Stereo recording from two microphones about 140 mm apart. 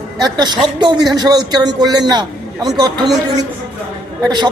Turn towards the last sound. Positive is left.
turn(degrees=-30)  # may be behind; listen again after turning